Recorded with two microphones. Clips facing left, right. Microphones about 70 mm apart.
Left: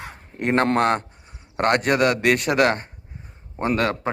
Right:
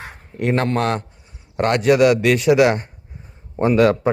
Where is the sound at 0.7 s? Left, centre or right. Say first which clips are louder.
Left 1 dB; left.